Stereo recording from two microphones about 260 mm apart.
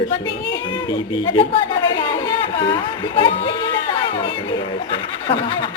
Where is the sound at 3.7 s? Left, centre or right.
Centre.